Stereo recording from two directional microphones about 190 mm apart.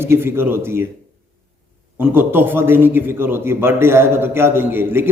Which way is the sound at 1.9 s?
10° right (ahead or behind).